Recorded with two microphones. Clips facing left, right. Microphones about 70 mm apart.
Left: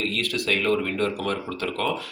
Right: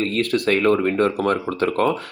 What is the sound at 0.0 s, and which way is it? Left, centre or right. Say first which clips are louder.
Speech: right 7 dB; right.